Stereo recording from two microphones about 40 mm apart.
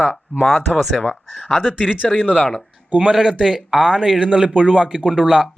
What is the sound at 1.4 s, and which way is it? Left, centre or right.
Speech, centre.